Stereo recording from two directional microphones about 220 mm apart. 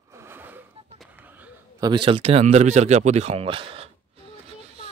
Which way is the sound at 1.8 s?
20° right (ahead or behind).